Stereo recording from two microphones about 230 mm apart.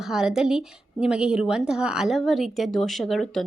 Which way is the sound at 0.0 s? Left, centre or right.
Centre.